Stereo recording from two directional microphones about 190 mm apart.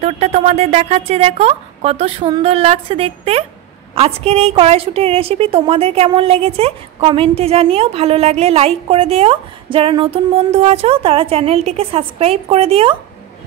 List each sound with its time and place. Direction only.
0.0 s a woman's voice: 35° right (ahead or behind)